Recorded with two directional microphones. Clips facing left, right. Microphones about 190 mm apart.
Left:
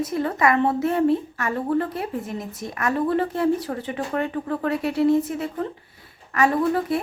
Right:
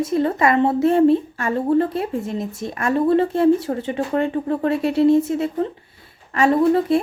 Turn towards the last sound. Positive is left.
turn(degrees=-25)  # may be behind; listen again after turning